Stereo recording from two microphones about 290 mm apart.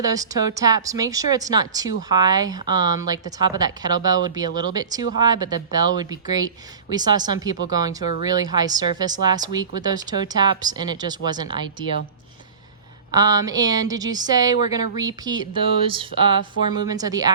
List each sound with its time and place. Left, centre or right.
0.0 s speech: centre
13.1 s speech: centre